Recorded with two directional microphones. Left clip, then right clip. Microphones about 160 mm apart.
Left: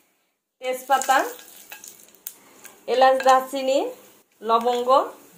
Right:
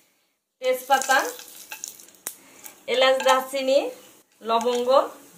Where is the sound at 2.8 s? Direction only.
40° left (ahead or behind).